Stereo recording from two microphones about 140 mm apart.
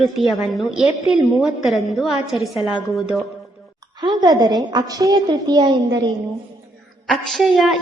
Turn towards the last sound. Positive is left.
turn(degrees=0)  # may be behind; listen again after turning